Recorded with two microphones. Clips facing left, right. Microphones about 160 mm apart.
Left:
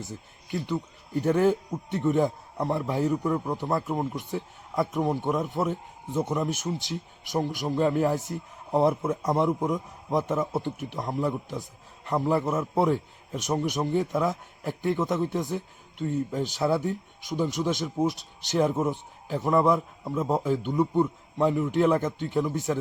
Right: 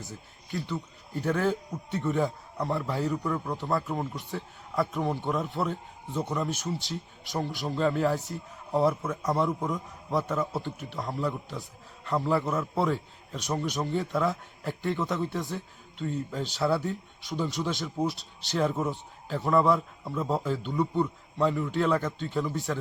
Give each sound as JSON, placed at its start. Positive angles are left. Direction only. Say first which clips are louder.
{"t": 0.1, "sound": "a man's voice", "louder": "left 1 dB", "side_deg": 15}